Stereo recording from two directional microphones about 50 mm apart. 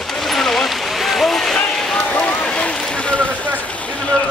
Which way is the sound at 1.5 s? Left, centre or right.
Centre.